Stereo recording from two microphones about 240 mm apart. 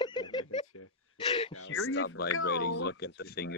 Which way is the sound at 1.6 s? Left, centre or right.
Left.